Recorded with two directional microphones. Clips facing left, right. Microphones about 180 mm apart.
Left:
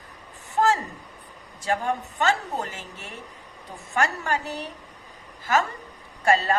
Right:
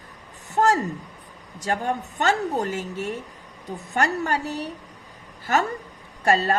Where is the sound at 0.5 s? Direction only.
40° right (ahead or behind).